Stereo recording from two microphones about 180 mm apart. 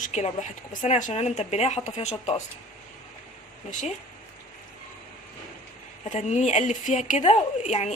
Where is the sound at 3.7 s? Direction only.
45° left (ahead or behind).